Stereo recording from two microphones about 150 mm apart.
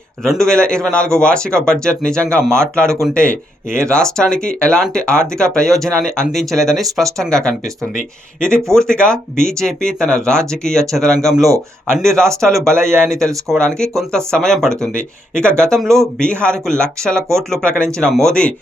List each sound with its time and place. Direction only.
0.2 s speech: 5° left (ahead or behind)
11.4 s a man's voice: 20° right (ahead or behind)
11.9 s speech: 5° left (ahead or behind)